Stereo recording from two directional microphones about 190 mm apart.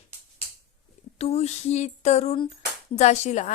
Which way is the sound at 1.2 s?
35° left (ahead or behind).